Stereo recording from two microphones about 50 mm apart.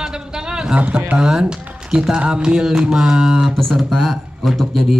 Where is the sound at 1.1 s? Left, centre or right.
Centre.